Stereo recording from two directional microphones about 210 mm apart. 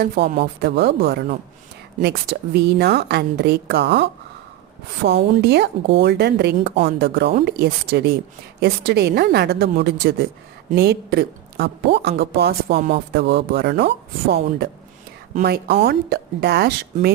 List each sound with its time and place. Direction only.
0.0 s speech: 50° right (ahead or behind)